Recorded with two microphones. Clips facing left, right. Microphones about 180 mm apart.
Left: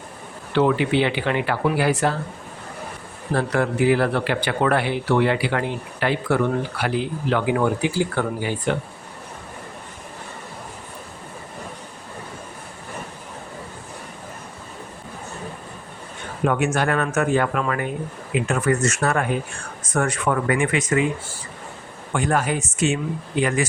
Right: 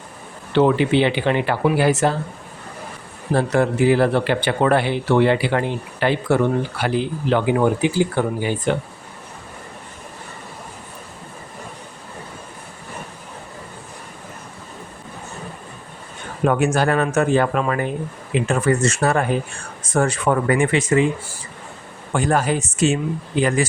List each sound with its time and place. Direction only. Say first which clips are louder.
0.5 s a man's voice: right 3 dB; 25° right (ahead or behind)
3.3 s a man's voice: right 3 dB; 25° right (ahead or behind)
16.5 s a man's voice: right 3 dB; 35° right (ahead or behind)
22.1 s speech: right 3 dB; 35° right (ahead or behind)